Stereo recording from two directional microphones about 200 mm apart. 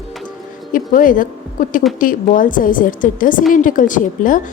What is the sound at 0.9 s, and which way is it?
A woman's voice, 45° left (ahead or behind).